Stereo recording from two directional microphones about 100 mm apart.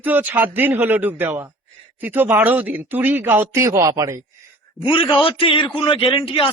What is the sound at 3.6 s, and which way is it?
Speech, 30° right (ahead or behind).